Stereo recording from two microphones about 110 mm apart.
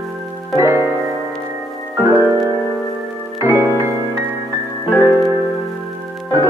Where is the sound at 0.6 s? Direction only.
25° right (ahead or behind).